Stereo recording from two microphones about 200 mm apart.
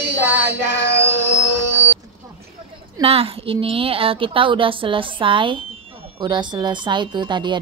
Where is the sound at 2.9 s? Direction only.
30° right (ahead or behind).